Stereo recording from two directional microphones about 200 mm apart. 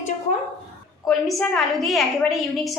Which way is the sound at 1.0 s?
Centre (ahead or behind).